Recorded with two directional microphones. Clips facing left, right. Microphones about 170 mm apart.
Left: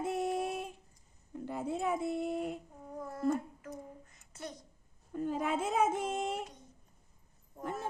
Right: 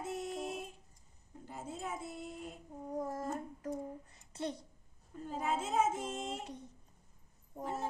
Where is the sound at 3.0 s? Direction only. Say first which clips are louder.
Left 5 dB; 40° right (ahead or behind).